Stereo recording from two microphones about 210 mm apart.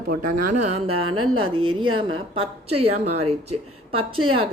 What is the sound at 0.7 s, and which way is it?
Music, 90° right.